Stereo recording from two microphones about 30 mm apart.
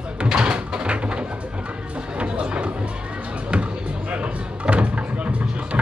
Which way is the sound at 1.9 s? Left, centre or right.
Right.